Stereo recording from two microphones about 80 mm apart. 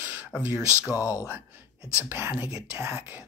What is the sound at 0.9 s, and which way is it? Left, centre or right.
Speech, left.